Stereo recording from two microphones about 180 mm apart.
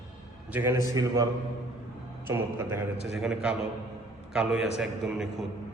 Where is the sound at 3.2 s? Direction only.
5° right (ahead or behind).